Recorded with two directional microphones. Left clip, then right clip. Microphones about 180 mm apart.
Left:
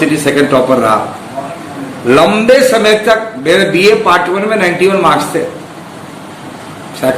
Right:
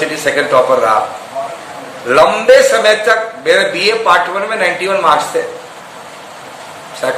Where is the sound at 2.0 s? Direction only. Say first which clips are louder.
Left 1 dB; 20° left (ahead or behind).